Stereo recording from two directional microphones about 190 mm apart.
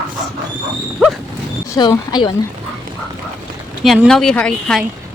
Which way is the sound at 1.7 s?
20° left (ahead or behind).